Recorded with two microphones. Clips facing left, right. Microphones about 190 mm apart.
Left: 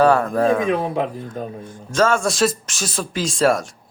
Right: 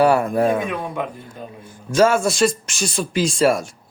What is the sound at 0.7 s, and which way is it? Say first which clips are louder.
Speech: left 5 dB; 30° left (ahead or behind).